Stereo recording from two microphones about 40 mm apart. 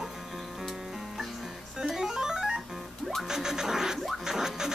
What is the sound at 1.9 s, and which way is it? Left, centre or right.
Music, centre.